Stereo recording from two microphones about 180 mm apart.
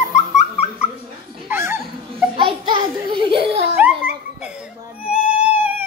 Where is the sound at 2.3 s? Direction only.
25° right (ahead or behind).